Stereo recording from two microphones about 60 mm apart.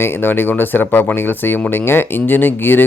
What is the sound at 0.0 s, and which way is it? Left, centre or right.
Speech, left.